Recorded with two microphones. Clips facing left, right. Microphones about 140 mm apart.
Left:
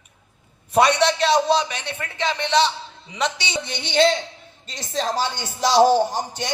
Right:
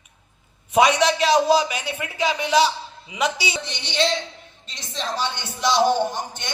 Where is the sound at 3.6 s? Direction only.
50° left (ahead or behind).